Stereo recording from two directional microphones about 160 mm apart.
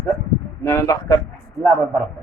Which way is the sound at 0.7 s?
20° left (ahead or behind).